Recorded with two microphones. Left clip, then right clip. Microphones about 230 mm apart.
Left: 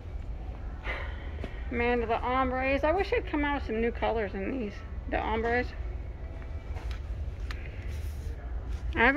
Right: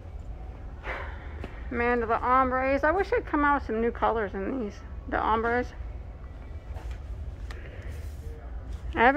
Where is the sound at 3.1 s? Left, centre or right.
Right.